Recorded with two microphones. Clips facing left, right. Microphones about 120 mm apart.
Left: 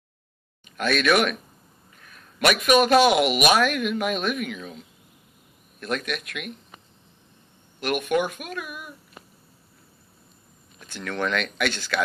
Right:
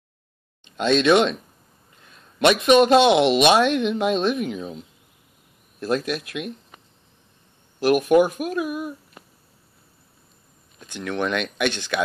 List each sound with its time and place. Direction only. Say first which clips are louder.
0.7 s a man's voice: right 4 dB; 25° right (ahead or behind)
5.8 s a man's voice: right 5 dB; 30° right (ahead or behind)
7.9 s speech: right 7 dB; 35° right (ahead or behind)
10.9 s speech: right 2 dB; 15° right (ahead or behind)